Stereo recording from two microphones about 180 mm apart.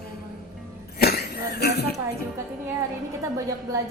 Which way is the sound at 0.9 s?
60° left (ahead or behind).